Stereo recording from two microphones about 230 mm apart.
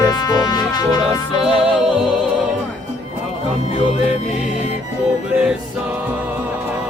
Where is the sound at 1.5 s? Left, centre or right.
Centre.